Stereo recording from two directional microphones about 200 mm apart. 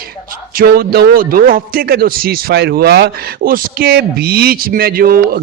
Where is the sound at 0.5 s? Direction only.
50° right (ahead or behind).